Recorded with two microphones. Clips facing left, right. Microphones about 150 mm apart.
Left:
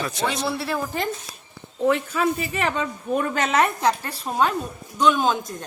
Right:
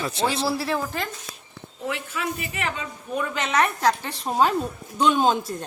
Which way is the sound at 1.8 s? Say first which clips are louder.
Left 8 dB; 35° left (ahead or behind).